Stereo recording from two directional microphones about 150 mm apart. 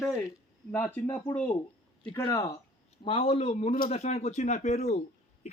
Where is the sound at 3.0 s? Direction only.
40° left (ahead or behind).